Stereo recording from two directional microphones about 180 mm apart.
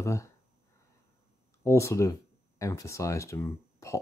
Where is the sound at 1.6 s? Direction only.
15° left (ahead or behind).